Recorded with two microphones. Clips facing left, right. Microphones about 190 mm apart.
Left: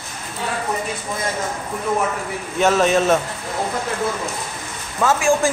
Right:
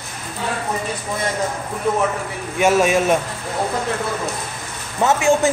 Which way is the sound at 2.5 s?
10° right (ahead or behind).